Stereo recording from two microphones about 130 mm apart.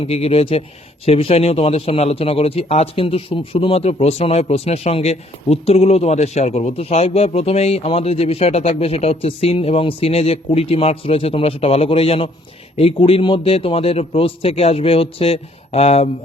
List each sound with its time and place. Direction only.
0.0 s speech: 45° left (ahead or behind)